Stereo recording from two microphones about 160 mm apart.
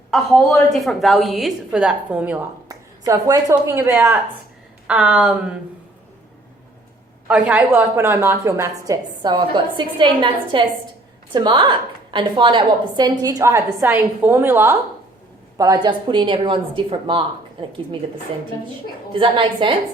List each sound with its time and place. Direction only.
0.1 s a woman's voice: centre (ahead or behind)
2.6 s a woman's voice: 20° right (ahead or behind); by 5.5 s 5° right (ahead or behind)
7.3 s a woman's voice: 5° right (ahead or behind)
9.3 s a woman's voice: 30° right (ahead or behind)
19.1 s a woman's voice: 30° right (ahead or behind)